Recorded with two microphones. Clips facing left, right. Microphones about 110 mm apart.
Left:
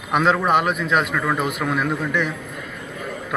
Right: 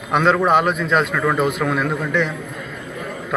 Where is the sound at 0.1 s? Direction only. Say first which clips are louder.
Right 2 dB; 5° left (ahead or behind).